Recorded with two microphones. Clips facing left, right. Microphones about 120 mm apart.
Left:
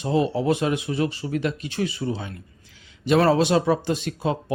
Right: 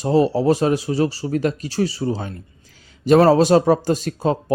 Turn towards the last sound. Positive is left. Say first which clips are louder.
# right 5 dB
turn(degrees=-40)  # may be behind; listen again after turning